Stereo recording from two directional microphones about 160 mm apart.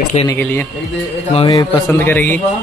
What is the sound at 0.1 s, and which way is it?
Speech, 45° left (ahead or behind).